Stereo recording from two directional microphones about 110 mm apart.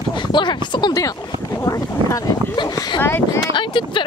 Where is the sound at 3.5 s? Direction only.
45° left (ahead or behind).